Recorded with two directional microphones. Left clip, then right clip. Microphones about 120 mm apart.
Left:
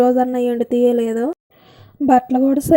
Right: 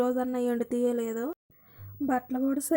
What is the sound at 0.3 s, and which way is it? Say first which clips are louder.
Speech: left 12 dB; 10° left (ahead or behind).